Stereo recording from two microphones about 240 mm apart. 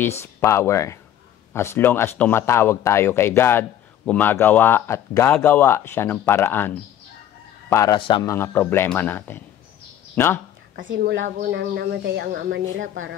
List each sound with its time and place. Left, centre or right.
0.0 s speech: centre
10.8 s speech: right
11.3 s speech: right